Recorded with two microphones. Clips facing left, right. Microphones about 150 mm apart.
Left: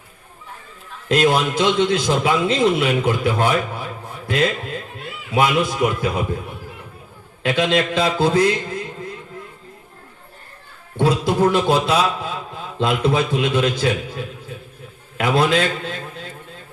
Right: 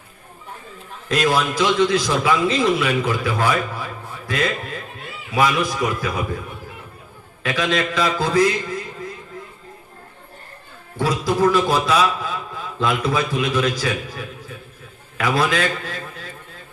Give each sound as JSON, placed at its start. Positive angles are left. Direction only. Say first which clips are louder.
{"t": 1.0, "sound": "a man's voice", "louder": "left 3 dB", "side_deg": 25}
{"t": 5.3, "sound": "a man's voice", "louder": "left 1 dB", "side_deg": 25}
{"t": 7.4, "sound": "a man's voice", "louder": "left 3 dB", "side_deg": 25}
{"t": 10.9, "sound": "a man's voice", "louder": "left 3 dB", "side_deg": 25}